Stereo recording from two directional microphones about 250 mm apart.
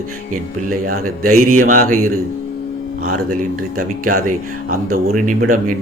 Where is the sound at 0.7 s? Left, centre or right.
Right.